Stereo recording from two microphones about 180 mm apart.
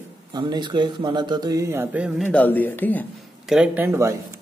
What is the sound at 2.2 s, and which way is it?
Speech, 10° left (ahead or behind).